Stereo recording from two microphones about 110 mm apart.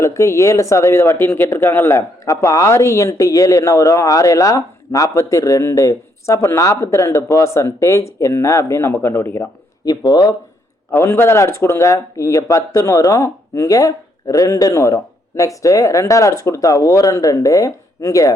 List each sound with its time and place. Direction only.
0.0 s speech: 25° left (ahead or behind)
9.8 s speech: 40° left (ahead or behind)
10.9 s speech: 25° left (ahead or behind)